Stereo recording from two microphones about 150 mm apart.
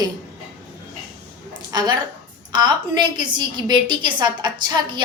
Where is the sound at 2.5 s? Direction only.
30° right (ahead or behind).